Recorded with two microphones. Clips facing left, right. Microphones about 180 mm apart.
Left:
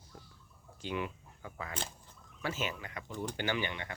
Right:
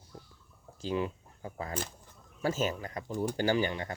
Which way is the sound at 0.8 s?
35° right (ahead or behind).